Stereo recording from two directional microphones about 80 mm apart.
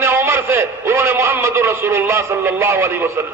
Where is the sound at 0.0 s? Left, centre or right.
Right.